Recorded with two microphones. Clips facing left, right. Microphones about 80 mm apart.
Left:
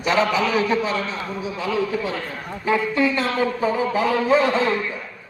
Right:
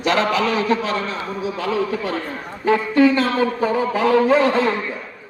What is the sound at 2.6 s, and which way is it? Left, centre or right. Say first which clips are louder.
Speech: right 5 dB; right.